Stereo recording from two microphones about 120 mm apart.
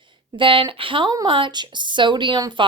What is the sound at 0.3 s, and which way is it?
A woman's voice, 45° right (ahead or behind).